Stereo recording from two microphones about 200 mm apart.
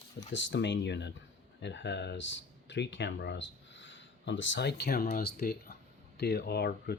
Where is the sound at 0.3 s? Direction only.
65° left (ahead or behind).